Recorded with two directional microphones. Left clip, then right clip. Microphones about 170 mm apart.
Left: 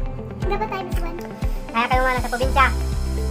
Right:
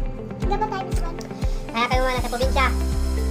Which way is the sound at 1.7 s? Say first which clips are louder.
Left 3 dB; 15° right (ahead or behind).